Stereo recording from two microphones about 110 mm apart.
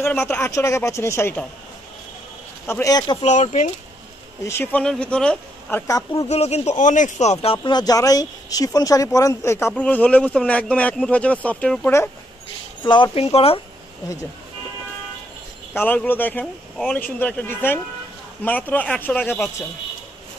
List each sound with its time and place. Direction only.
0.0 s speech: 20° left (ahead or behind)
2.6 s speech: 20° left (ahead or behind)
2.9 s speech: 35° left (ahead or behind)
3.2 s speech: 90° left
4.5 s speech: 20° left (ahead or behind)
4.8 s speech: 5° left (ahead or behind)
6.1 s speech: 75° left (ahead or behind)
7.5 s speech: 45° left (ahead or behind); by 11.9 s 10° left (ahead or behind)
12.8 s speech: 45° left (ahead or behind)
13.1 s speech: 60° left (ahead or behind)
15.7 s speech: 15° left (ahead or behind)